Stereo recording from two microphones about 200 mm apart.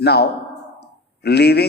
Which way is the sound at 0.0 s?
55° left (ahead or behind).